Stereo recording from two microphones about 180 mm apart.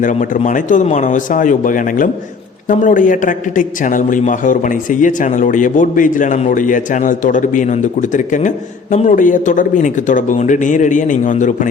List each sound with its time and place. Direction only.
0.0 s a man's voice: 45° left (ahead or behind)